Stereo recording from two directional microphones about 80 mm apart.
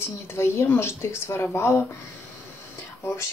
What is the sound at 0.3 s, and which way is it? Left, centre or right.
Speech, left.